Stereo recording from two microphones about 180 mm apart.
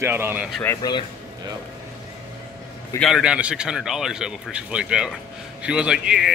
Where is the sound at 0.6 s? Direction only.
20° left (ahead or behind).